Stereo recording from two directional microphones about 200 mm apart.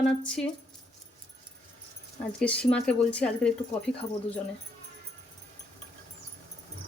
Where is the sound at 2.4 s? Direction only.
5° left (ahead or behind).